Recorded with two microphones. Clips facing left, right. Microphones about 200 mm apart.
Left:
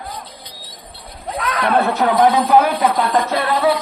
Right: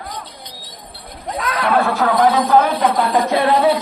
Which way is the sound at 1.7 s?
20° left (ahead or behind).